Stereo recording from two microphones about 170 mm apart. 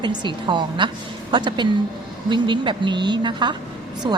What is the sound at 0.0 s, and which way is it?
A woman's voice, 25° right (ahead or behind).